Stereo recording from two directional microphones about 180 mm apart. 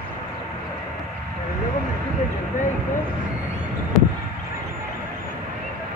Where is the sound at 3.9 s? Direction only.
Centre (ahead or behind).